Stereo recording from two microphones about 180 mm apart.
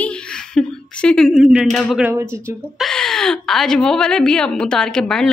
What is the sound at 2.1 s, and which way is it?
Speech, 15° right (ahead or behind).